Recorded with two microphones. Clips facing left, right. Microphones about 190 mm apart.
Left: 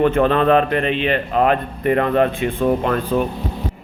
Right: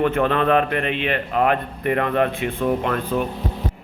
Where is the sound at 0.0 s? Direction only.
30° left (ahead or behind).